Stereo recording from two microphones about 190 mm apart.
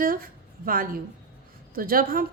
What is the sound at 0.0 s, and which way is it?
A woman's voice, 50° right (ahead or behind).